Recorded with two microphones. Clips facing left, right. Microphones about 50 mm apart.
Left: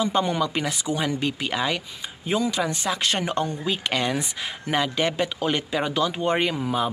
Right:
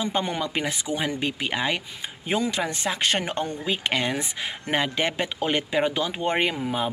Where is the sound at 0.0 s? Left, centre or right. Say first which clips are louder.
Left 4 dB; right.